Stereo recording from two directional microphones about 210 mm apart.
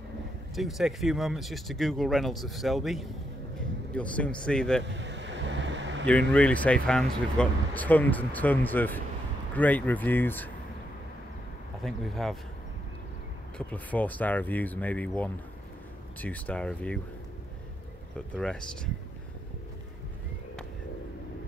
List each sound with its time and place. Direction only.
0.6 s speech: centre (ahead or behind)
4.8 s a sound: 60° right (ahead or behind)
6.3 s speech: 5° left (ahead or behind)
11.8 s speech: centre (ahead or behind)
13.6 s speech: 5° left (ahead or behind)
18.3 s speech: 5° left (ahead or behind)